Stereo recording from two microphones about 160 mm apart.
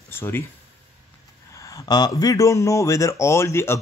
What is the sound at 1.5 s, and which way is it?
Speech, 20° left (ahead or behind).